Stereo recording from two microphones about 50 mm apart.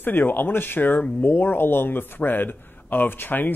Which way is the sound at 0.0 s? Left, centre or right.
Left.